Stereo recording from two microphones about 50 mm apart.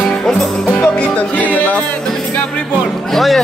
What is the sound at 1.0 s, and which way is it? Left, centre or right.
Music, left.